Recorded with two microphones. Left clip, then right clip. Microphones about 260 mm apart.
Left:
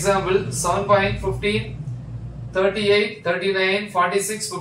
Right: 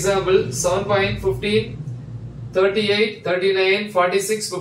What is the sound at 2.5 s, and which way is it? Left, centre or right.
Speech, centre.